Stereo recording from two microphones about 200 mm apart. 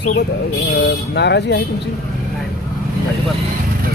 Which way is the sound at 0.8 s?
55° left (ahead or behind).